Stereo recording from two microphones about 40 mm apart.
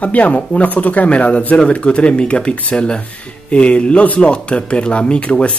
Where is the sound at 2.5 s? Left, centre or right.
Left.